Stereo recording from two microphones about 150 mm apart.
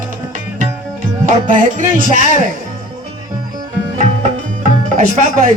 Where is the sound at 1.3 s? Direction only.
60° right (ahead or behind).